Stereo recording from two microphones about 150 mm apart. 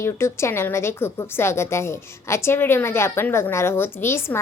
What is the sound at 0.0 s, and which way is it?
A woman's voice, 20° left (ahead or behind).